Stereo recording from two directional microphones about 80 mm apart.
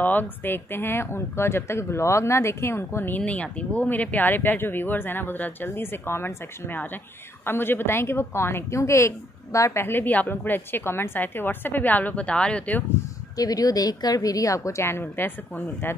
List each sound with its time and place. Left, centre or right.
0.0 s speech: left
3.2 s speech: centre; by 9.7 s left
9.7 s speech: left
13.4 s a woman's voice: left